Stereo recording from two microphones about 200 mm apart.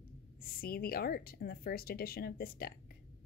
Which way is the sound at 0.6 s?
50° left (ahead or behind).